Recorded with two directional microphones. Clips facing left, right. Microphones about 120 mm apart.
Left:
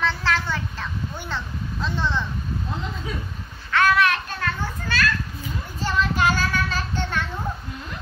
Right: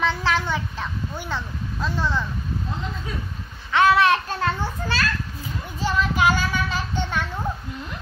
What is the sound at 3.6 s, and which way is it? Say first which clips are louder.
A child's voice: right 3 dB; 20° right (ahead or behind).